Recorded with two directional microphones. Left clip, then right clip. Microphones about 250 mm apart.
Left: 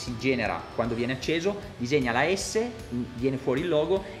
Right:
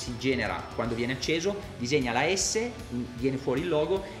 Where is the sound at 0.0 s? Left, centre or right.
Left.